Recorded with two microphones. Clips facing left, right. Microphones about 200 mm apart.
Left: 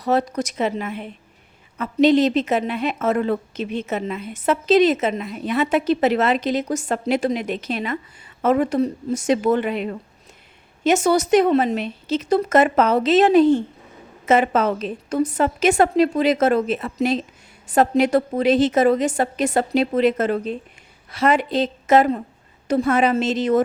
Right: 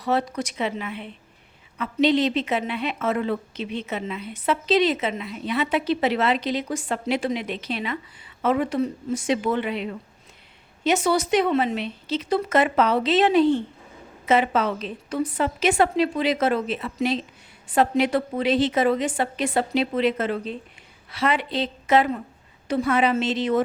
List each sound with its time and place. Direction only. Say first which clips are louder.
0.0 s a woman's voice: left 4 dB; 40° left (ahead or behind)